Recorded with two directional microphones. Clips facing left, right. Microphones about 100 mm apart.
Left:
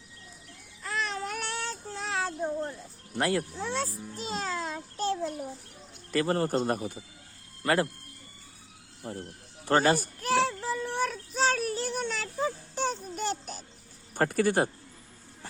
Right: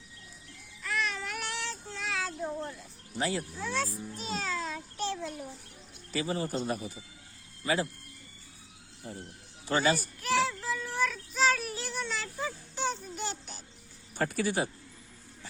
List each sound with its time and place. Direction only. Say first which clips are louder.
0.8 s child singing: left 1 dB; 35° left (ahead or behind)
3.2 s a man's voice: left 4 dB; 60° left (ahead or behind)
3.6 s speech: left 1 dB; 30° left (ahead or behind)
4.1 s music: left 2 dB; 35° left (ahead or behind)
6.1 s a man's voice: left 6 dB; 60° left (ahead or behind)
9.0 s a man's voice: left 5 dB; 60° left (ahead or behind)
9.6 s child singing: left 4 dB; 50° left (ahead or behind)
14.2 s speech: left 5 dB; 50° left (ahead or behind)